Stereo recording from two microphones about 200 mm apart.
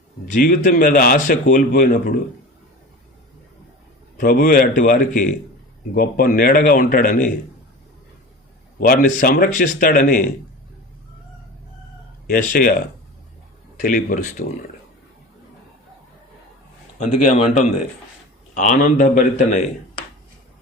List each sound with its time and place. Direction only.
0.3 s a man's voice: 40° left (ahead or behind)
4.2 s a man's voice: 45° left (ahead or behind)
8.9 s a man's voice: 45° left (ahead or behind)
12.3 s a man's voice: 45° left (ahead or behind)
13.8 s a man's voice: 40° left (ahead or behind)
17.3 s a man's voice: 30° left (ahead or behind)